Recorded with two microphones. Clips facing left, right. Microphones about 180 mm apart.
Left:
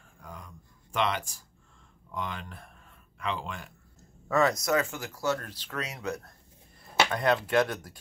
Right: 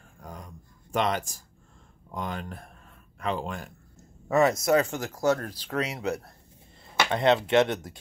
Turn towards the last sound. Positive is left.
turn(degrees=-20)  # may be behind; listen again after turning